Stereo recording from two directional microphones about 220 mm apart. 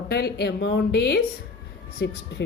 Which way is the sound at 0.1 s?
45° left (ahead or behind).